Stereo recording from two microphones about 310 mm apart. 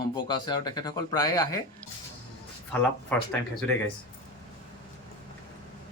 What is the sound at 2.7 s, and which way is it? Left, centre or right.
Speech, centre.